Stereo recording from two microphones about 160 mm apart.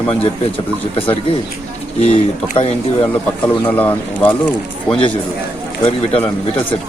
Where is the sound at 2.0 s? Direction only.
40° left (ahead or behind).